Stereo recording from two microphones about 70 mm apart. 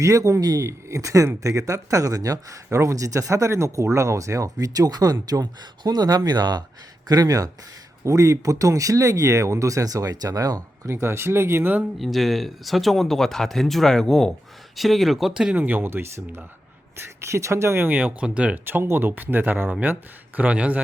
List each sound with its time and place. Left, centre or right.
0.0 s speech: right
7.1 s speech: right
8.0 s speech: right
11.0 s speech: right
11.9 s speech: centre
15.5 s speech: right
17.8 s speech: right
18.6 s speech: right